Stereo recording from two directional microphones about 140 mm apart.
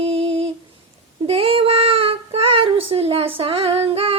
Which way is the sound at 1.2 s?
45° right (ahead or behind).